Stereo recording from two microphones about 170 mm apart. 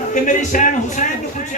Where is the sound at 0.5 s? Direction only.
50° left (ahead or behind).